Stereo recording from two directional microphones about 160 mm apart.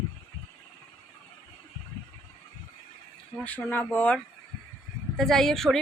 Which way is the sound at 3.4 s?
10° left (ahead or behind).